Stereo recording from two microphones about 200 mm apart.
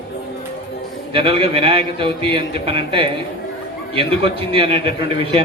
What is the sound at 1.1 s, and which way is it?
A man's voice, 25° right (ahead or behind).